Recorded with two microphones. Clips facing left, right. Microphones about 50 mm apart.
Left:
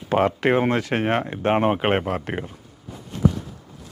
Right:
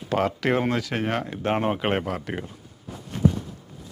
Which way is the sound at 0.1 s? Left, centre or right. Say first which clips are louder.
Left 4 dB; left.